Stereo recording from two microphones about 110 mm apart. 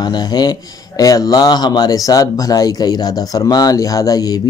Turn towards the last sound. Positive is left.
turn(degrees=35)  # may be behind; listen again after turning